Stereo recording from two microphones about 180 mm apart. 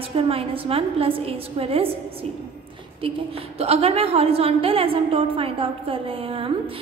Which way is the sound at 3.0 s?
30° right (ahead or behind).